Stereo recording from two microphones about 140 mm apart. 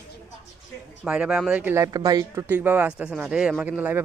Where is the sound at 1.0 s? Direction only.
10° right (ahead or behind).